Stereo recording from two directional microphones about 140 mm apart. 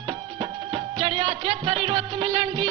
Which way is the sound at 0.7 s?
35° right (ahead or behind).